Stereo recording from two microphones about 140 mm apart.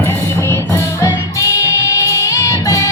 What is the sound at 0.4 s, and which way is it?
Music, 20° left (ahead or behind).